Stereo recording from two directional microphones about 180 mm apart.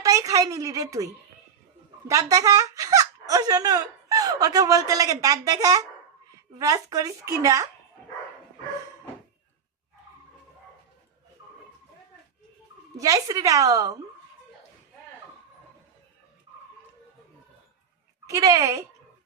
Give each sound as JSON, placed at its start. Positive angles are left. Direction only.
{"t": 0.0, "sound": "a woman's voice", "side_deg": -20}
{"t": 13.0, "sound": "a woman's voice", "side_deg": -20}
{"t": 18.3, "sound": "speech", "side_deg": -20}